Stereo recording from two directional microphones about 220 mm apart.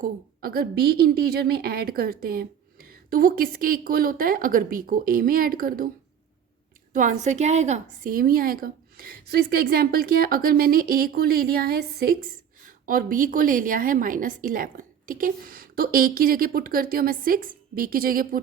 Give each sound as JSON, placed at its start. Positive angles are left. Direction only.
{"t": 0.0, "sound": "a woman's voice", "side_deg": -40}
{"t": 6.9, "sound": "a woman's voice", "side_deg": -35}